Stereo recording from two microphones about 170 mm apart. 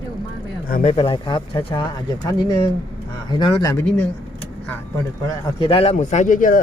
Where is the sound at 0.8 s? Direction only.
35° left (ahead or behind).